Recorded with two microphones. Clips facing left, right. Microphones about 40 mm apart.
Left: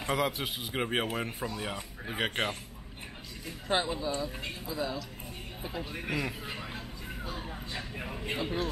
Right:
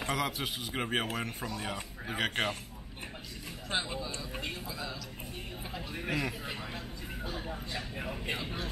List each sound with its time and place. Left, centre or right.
0.0 s speech: centre
3.6 s speech: centre
7.9 s speech: centre
8.4 s speech: centre